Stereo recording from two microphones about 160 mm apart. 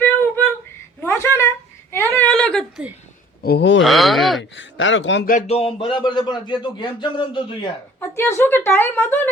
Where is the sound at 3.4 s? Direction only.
85° left.